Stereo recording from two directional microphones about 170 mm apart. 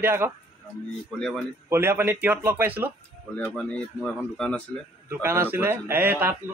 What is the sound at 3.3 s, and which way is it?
Speech, 10° left (ahead or behind).